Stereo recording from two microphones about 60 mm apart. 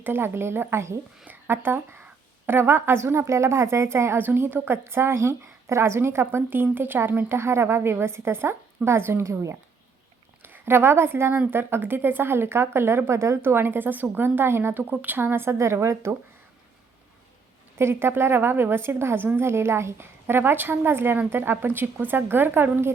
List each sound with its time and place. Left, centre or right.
0.0 s a woman's voice: right
4.3 s a woman's voice: right
9.2 s speech: right
10.4 s a woman's voice: right
17.7 s speech: right